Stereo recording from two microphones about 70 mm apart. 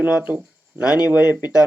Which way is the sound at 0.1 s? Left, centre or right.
Centre.